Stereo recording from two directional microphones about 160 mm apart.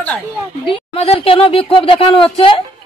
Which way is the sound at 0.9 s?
35° left (ahead or behind).